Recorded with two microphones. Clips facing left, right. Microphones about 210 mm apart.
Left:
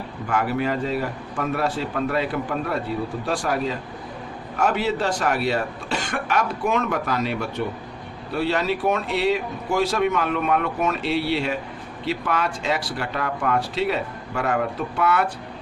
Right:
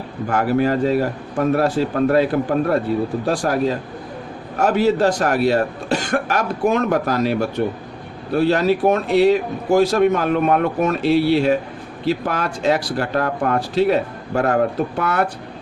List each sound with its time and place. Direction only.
0.3 s a man's voice: 40° right (ahead or behind)